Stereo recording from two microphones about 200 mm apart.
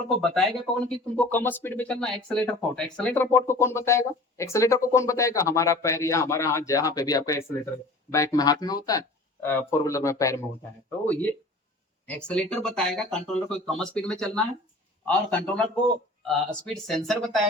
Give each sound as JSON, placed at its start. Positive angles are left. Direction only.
{"t": 0.2, "sound": "speech", "side_deg": 5}